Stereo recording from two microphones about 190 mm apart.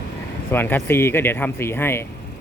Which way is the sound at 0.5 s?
10° left (ahead or behind).